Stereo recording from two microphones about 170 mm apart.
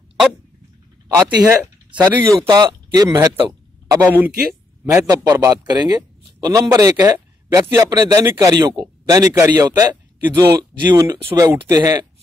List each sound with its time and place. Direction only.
1.0 s a man's voice: 15° right (ahead or behind)